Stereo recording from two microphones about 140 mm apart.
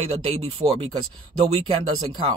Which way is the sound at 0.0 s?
45° right (ahead or behind).